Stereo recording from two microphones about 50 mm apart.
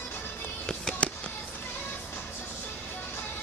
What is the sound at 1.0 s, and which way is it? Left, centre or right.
Fireworks, left.